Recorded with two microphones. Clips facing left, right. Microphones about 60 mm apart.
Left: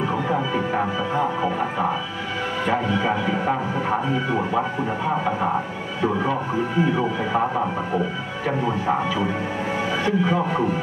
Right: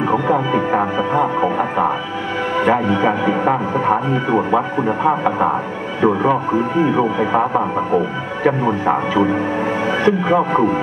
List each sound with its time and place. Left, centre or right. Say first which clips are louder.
0.0 s music: right 6 dB; right
2.6 s speech: right 7 dB; right
7.2 s speech: right 6 dB; right